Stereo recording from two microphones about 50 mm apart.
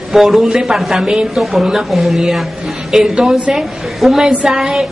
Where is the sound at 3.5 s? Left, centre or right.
Centre.